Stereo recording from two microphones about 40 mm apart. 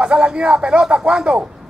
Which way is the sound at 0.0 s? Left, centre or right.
Right.